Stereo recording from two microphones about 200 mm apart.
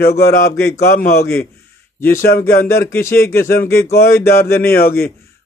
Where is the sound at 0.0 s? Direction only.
50° left (ahead or behind).